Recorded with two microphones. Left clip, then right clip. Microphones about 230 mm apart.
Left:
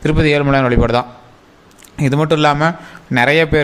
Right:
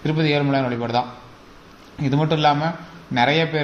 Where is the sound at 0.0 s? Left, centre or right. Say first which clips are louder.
Left 7 dB; left.